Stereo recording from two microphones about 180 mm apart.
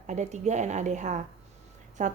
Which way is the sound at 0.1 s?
40° right (ahead or behind).